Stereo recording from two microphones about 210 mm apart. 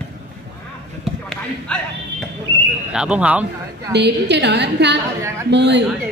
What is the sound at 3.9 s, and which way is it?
A woman's voice, 55° right (ahead or behind).